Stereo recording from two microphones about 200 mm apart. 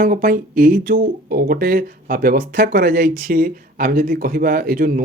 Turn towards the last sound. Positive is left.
turn(degrees=-45)  # may be behind; listen again after turning